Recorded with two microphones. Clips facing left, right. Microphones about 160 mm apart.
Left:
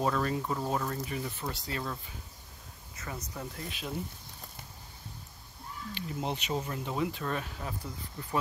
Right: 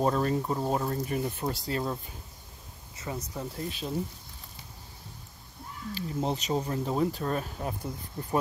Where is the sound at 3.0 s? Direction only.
20° right (ahead or behind).